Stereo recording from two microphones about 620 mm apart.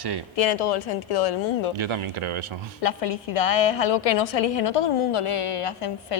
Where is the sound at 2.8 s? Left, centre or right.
Left.